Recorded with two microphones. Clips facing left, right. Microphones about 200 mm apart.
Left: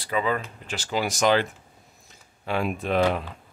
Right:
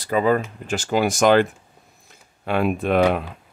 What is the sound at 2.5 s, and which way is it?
Speech, 60° right (ahead or behind).